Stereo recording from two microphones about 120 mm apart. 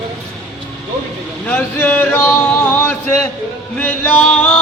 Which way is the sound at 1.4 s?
15° left (ahead or behind).